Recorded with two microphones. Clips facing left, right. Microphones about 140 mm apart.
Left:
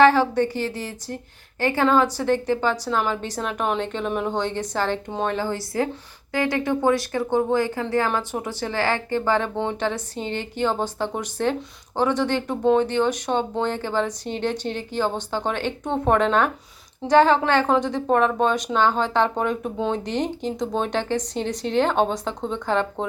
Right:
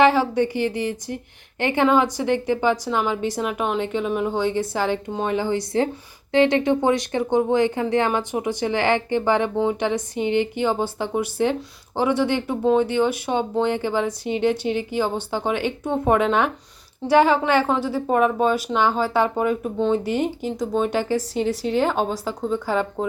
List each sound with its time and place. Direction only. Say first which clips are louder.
0.0 s a woman's voice: left 1 dB; 15° right (ahead or behind)